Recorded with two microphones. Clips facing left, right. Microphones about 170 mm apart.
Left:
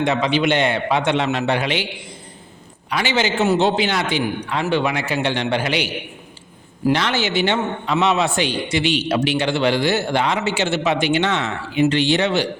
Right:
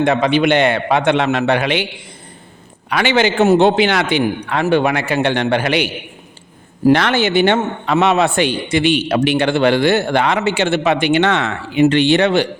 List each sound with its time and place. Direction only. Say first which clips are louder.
0.0 s a man's voice: right 4 dB; 55° right (ahead or behind)
2.9 s a man's voice: right 5 dB; 65° right (ahead or behind)
6.9 s a man's voice: right 5 dB; 55° right (ahead or behind)